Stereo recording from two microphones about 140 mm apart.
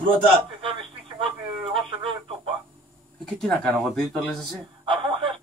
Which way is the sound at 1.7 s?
40° right (ahead or behind).